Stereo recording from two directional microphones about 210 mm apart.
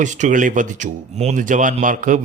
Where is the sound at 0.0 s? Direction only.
35° right (ahead or behind).